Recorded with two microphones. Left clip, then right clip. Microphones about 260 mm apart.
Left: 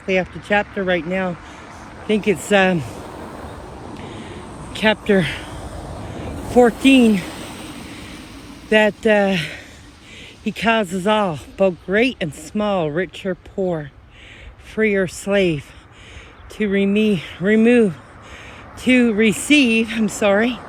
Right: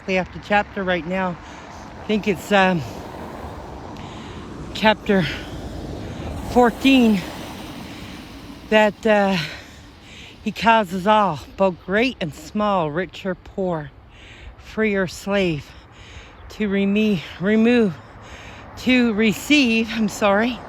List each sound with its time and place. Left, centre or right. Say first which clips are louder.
0.1 s speech: left 1 dB; centre
1.3 s vehicle: left 1 dB; right
2.0 s speech: left 3 dB; centre
2.8 s a sound: left 1 dB; right
4.4 s a sound: left 1 dB; left
4.7 s speech: left 1 dB; centre
5.5 s vehicle: left 1 dB; left
6.2 s vehicle: left 2 dB; right
6.5 s speech: left 3 dB; centre
6.9 s a sound: left 3 dB; right
8.7 s speech: left 1 dB; centre